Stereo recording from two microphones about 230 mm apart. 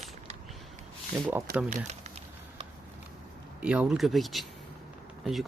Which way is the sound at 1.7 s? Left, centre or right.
Right.